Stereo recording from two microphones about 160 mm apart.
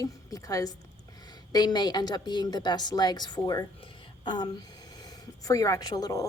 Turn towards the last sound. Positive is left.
turn(degrees=25)  # may be behind; listen again after turning